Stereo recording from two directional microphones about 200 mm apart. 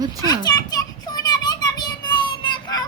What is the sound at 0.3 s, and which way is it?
Children playing, 20° left (ahead or behind).